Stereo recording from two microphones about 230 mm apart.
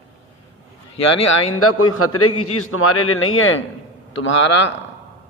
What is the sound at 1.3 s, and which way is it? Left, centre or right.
A man's voice, left.